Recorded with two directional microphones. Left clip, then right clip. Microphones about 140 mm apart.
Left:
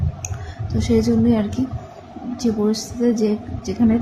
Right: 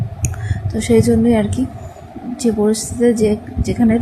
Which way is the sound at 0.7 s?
35° right (ahead or behind).